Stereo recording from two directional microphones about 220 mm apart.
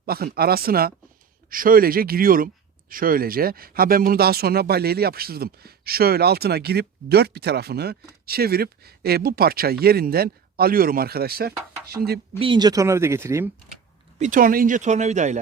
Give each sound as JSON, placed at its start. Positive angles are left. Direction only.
{"t": 0.0, "sound": "speech", "side_deg": -45}
{"t": 12.4, "sound": "speech", "side_deg": -20}
{"t": 14.2, "sound": "speech", "side_deg": -35}